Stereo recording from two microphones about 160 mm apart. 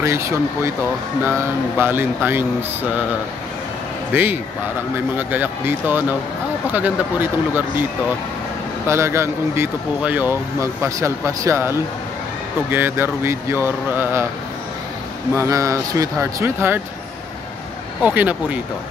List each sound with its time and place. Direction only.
0.0 s speech: 20° right (ahead or behind)
1.8 s speech: 15° right (ahead or behind)
4.1 s speech: 10° right (ahead or behind)
8.8 s speech: 15° right (ahead or behind)
15.3 s speech: 20° right (ahead or behind)
18.0 s speech: 10° right (ahead or behind)